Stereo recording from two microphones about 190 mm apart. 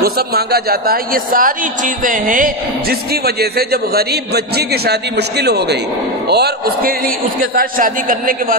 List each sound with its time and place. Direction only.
0.0 s a man's voice: 55° right (ahead or behind)
3.3 s a man's voice: 55° right (ahead or behind)
5.4 s a man's voice: 60° right (ahead or behind)
7.5 s a man's voice: 45° right (ahead or behind)